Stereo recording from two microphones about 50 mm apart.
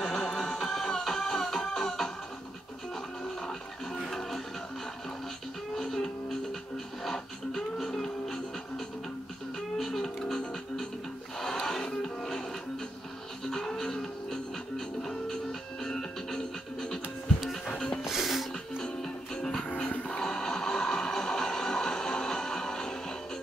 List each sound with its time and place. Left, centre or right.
0.0 s music: centre
3.4 s music: centre
5.8 s music: centre
13.5 s music: centre
15.8 s music: centre
17.6 s music: centre
18.0 s music: centre
18.9 s music: centre
19.9 s music: left
20.2 s music: centre